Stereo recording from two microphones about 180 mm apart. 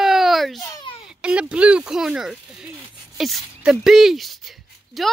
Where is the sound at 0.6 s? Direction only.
20° left (ahead or behind).